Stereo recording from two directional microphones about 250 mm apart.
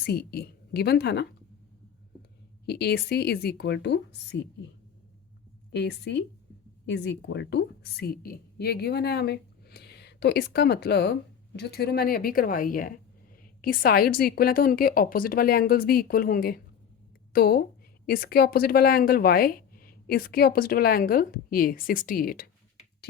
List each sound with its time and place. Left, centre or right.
0.0 s a woman's voice: left
2.6 s a woman's voice: left
5.7 s a woman's voice: left